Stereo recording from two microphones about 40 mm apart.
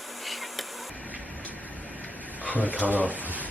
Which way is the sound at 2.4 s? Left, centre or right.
Left.